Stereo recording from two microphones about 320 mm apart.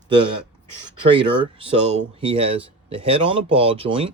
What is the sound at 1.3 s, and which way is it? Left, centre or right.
Speech, centre.